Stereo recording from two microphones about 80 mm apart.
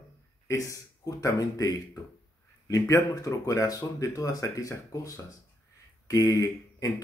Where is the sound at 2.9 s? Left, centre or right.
Left.